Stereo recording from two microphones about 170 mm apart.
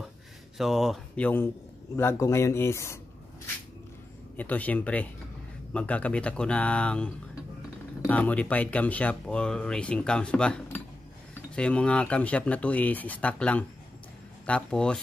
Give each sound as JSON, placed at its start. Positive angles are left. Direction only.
{"t": 0.6, "sound": "speech", "side_deg": 0}
{"t": 4.4, "sound": "speech", "side_deg": 10}